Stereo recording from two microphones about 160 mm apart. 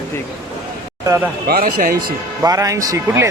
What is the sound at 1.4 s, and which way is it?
Speech, 65° right (ahead or behind).